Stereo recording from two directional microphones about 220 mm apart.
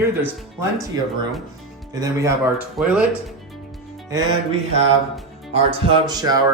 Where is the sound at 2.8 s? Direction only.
5° right (ahead or behind).